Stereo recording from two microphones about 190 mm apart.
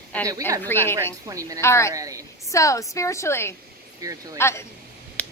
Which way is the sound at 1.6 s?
15° left (ahead or behind).